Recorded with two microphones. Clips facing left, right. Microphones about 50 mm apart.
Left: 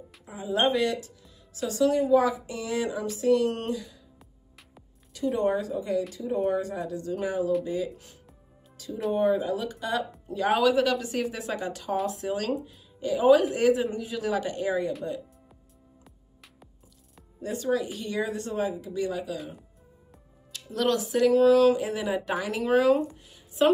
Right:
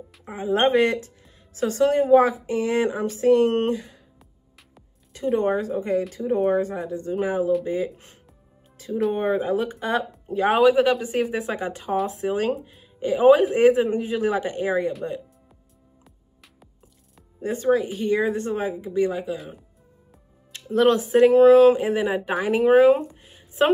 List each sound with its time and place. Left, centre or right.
0.2 s speech: right
5.4 s speech: right
8.7 s music: right
9.1 s a woman's voice: right
17.4 s a woman's voice: right
19.3 s speech: centre
20.5 s music: right
20.9 s a woman's voice: right
22.7 s speech: centre
23.6 s speech: right